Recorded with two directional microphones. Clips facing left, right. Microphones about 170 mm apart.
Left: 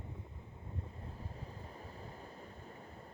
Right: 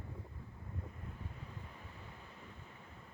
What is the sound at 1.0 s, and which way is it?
Waves, 35° left (ahead or behind).